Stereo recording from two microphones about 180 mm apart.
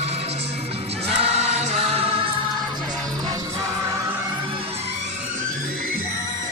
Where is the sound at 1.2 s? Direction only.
35° right (ahead or behind).